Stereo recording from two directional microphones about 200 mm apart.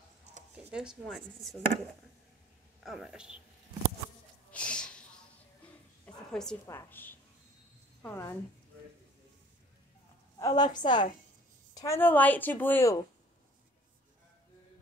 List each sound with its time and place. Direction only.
0.7 s speech: 5° right (ahead or behind)
2.8 s speech: centre (ahead or behind)
4.5 s a sound: 5° left (ahead or behind)
6.0 s a sound: 5° left (ahead or behind)
6.6 s a woman's voice: 10° left (ahead or behind)
10.4 s a woman's voice: 20° left (ahead or behind)